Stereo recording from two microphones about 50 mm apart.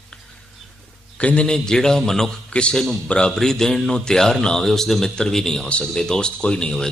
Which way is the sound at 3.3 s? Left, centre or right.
Centre.